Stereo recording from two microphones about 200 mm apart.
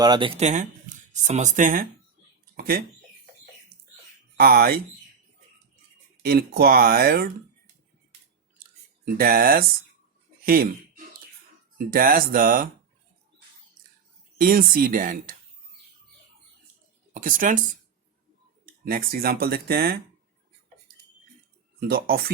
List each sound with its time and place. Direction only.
0.0 s speech: 20° right (ahead or behind); by 2.8 s 50° right (ahead or behind)
4.4 s speech: 50° right (ahead or behind)
6.2 s speech: 50° right (ahead or behind)
9.0 s speech: 45° right (ahead or behind)
14.3 s speech: 45° right (ahead or behind)
17.2 s speech: 40° right (ahead or behind)
18.6 s speech: 45° right (ahead or behind)
21.8 s speech: 50° right (ahead or behind)